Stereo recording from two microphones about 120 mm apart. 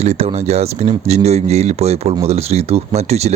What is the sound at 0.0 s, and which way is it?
Speech, 60° right (ahead or behind).